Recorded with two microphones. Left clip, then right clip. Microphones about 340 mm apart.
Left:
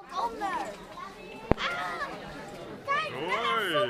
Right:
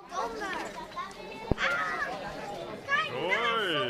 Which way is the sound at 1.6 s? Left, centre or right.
Centre.